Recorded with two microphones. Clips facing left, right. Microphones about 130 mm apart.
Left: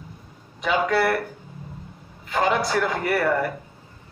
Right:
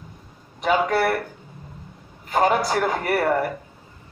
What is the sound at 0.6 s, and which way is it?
Speech, 45° right (ahead or behind).